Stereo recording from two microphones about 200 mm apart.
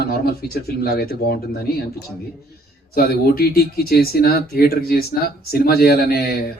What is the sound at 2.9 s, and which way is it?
Speech, 50° left (ahead or behind).